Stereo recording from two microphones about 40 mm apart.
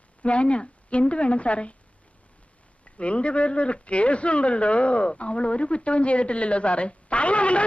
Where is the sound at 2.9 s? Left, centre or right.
Left.